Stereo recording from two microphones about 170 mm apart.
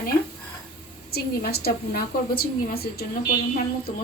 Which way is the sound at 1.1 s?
65° left (ahead or behind).